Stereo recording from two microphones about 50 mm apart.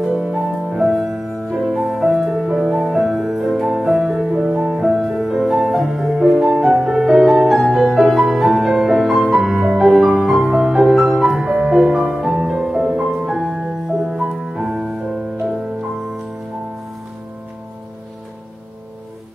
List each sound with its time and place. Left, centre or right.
0.0 s music: centre
2.5 s music: centre
4.8 s music: centre